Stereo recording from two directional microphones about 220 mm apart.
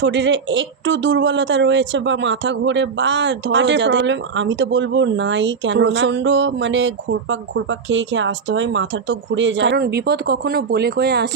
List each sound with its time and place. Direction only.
0.0 s speech: 55° right (ahead or behind)